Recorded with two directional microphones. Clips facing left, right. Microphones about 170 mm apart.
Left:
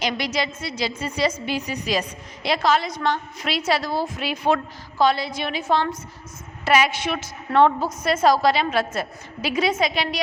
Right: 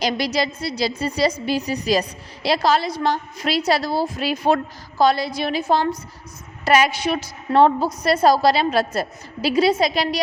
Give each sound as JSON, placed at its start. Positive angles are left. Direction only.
{"t": 0.0, "sound": "a woman's voice", "side_deg": -35}